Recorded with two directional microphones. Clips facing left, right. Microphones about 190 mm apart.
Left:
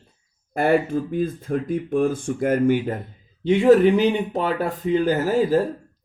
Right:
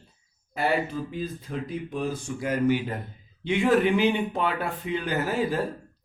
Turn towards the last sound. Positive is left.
turn(degrees=40)  # may be behind; listen again after turning